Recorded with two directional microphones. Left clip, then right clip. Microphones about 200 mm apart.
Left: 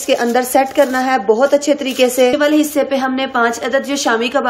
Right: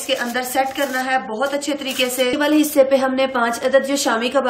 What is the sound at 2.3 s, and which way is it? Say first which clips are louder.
A woman's voice: left 2 dB; 5° left (ahead or behind).